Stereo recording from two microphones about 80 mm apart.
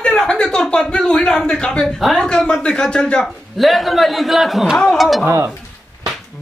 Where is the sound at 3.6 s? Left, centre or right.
Centre.